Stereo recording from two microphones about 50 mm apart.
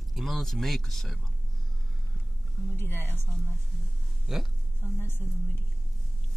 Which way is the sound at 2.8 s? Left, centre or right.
Left.